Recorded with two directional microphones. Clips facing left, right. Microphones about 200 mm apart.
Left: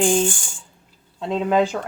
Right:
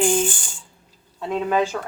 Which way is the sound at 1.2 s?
20° left (ahead or behind).